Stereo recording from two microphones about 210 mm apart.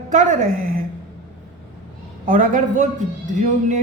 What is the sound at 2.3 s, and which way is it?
A woman's voice, 40° right (ahead or behind).